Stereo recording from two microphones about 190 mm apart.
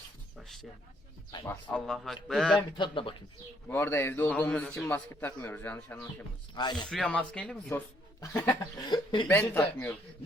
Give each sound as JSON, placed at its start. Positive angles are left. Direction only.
{"t": 0.3, "sound": "a sound", "side_deg": 0}
{"t": 1.5, "sound": "a man's voice", "side_deg": 5}
{"t": 2.6, "sound": "speech", "side_deg": 25}
{"t": 3.7, "sound": "a man's voice", "side_deg": 10}
{"t": 6.5, "sound": "speech", "side_deg": 25}
{"t": 6.8, "sound": "a man's voice", "side_deg": 5}